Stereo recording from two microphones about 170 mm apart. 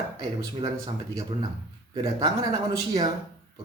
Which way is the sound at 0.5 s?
25° right (ahead or behind).